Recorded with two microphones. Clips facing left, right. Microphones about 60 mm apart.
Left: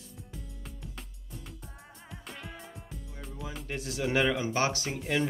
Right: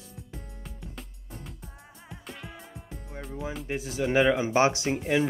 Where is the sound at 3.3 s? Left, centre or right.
Right.